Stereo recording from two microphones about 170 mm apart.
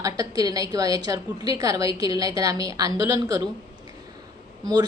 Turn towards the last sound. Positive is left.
turn(degrees=-25)  # may be behind; listen again after turning